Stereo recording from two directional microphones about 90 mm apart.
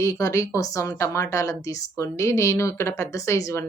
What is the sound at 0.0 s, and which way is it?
Speech, 35° left (ahead or behind).